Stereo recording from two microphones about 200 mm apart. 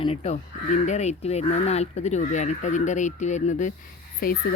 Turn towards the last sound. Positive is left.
turn(degrees=45)  # may be behind; listen again after turning